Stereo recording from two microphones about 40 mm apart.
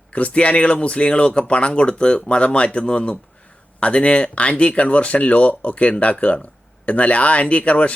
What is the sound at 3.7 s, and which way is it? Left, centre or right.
Speech, left.